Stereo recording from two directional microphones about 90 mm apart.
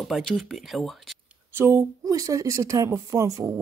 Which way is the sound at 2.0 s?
40° right (ahead or behind).